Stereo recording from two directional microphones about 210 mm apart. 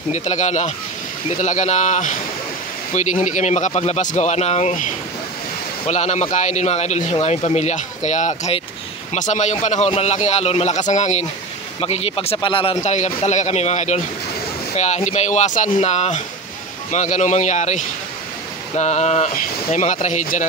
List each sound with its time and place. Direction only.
0.1 s a man's voice: 35° left (ahead or behind)